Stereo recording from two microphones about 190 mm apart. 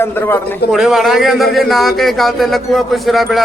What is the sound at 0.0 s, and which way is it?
Speech, 10° left (ahead or behind).